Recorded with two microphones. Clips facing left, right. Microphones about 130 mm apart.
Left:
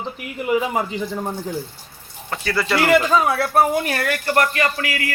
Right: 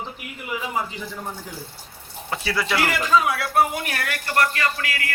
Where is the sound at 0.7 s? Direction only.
20° left (ahead or behind).